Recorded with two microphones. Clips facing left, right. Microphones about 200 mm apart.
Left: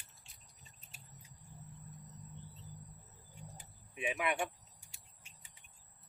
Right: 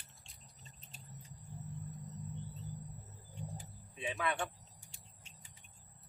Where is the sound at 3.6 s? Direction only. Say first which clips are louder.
Left 8 dB; 15° left (ahead or behind).